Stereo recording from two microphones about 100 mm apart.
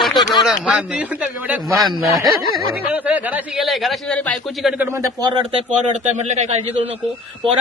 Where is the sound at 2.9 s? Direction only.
15° right (ahead or behind).